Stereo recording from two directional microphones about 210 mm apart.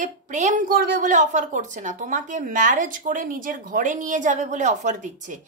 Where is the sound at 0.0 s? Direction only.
35° right (ahead or behind).